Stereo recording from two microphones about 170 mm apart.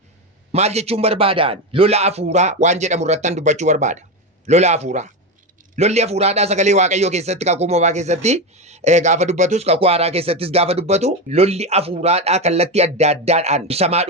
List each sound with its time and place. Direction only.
0.5 s a man's voice: 40° right (ahead or behind)